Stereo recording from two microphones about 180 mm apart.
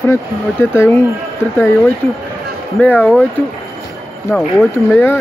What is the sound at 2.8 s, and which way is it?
Speech, 10° left (ahead or behind).